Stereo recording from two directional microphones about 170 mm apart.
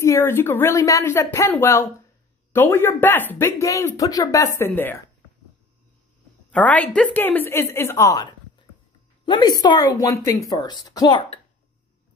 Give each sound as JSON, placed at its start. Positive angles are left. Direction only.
{"t": 0.0, "sound": "speech", "side_deg": 15}
{"t": 6.5, "sound": "a woman's voice", "side_deg": 10}